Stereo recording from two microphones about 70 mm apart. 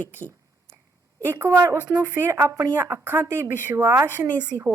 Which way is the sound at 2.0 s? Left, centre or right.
Right.